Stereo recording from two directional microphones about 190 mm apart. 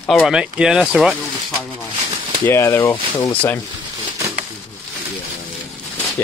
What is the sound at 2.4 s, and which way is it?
Speech, 15° left (ahead or behind).